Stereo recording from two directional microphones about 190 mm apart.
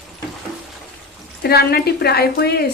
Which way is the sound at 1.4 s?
55° left (ahead or behind).